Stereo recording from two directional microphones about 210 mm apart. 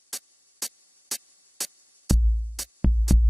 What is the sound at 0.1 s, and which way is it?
Music, centre (ahead or behind).